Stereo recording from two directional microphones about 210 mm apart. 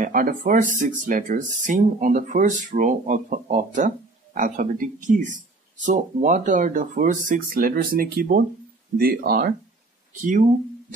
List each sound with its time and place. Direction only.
0.0 s speech: 40° right (ahead or behind)